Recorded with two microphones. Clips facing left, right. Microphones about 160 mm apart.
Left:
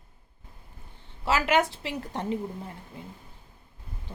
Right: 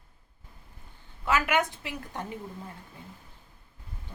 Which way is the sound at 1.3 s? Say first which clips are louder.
Left 2 dB; 30° left (ahead or behind).